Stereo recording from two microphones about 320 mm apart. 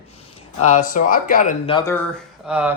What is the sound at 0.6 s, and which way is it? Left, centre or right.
Speech, left.